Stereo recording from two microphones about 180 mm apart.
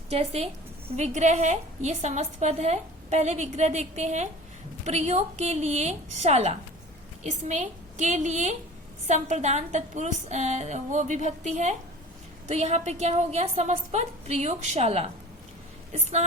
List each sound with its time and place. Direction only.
0.1 s a woman's voice: 35° right (ahead or behind)